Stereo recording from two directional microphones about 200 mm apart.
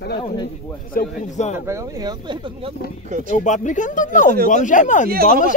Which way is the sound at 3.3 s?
40° left (ahead or behind).